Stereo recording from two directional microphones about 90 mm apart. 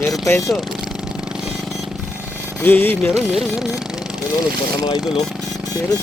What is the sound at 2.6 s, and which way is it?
Speech, 20° left (ahead or behind).